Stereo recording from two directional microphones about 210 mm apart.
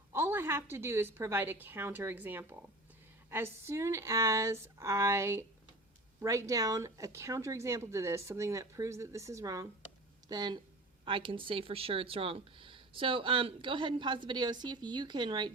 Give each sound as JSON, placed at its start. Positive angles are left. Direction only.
{"t": 0.1, "sound": "speech", "side_deg": -10}